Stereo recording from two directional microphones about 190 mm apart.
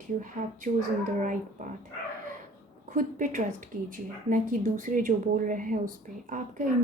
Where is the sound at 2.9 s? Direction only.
40° right (ahead or behind).